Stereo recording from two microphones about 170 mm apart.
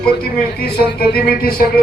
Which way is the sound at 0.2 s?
65° left (ahead or behind).